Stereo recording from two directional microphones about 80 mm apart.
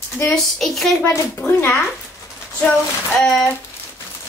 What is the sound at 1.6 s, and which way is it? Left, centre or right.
Speech, left.